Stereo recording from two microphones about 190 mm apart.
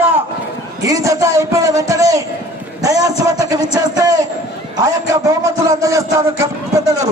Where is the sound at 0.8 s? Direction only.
15° right (ahead or behind).